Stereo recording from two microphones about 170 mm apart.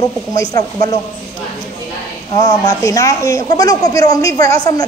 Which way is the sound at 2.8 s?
20° left (ahead or behind).